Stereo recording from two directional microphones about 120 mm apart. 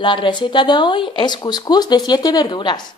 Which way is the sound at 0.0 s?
40° left (ahead or behind).